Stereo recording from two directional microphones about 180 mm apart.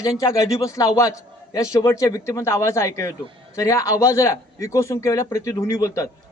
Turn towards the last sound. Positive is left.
turn(degrees=15)  # may be behind; listen again after turning